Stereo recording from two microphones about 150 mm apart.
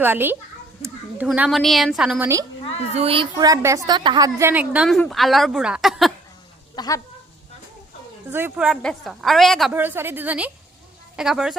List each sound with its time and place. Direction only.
0.0 s speech: 15° right (ahead or behind)
1.3 s a woman's voice: centre (ahead or behind)
2.2 s a woman's voice: 20° right (ahead or behind)
2.9 s a child's voice: 40° right (ahead or behind)
3.3 s a woman's voice: 25° right (ahead or behind)
4.9 s a woman's voice: centre (ahead or behind)
6.7 s speech: 25° left (ahead or behind)
8.3 s speech: 15° right (ahead or behind)
8.5 s a woman's voice: 5° right (ahead or behind)
9.7 s a woman's voice: 15° right (ahead or behind)